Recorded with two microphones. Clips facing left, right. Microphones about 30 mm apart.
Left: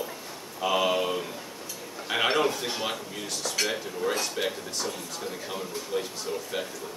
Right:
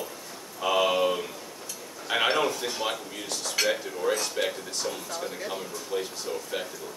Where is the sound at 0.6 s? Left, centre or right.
Centre.